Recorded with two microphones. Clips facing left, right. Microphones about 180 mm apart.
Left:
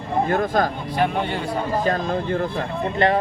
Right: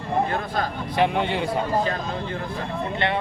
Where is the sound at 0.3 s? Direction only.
45° left (ahead or behind).